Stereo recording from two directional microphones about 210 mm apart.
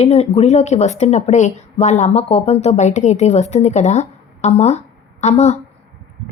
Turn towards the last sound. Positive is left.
turn(degrees=30)  # may be behind; listen again after turning